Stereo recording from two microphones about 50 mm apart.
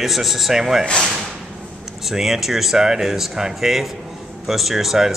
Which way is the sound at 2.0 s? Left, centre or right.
Centre.